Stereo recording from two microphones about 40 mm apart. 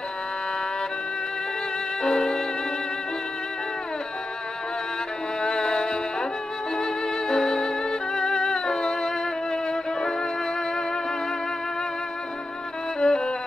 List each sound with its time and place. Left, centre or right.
2.0 s music: centre
5.4 s music: centre
13.0 s violin: centre